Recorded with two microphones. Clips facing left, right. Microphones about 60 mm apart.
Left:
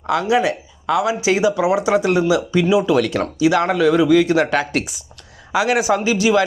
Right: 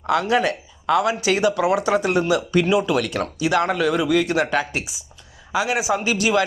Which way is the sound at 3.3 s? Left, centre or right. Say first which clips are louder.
Left 4 dB; right.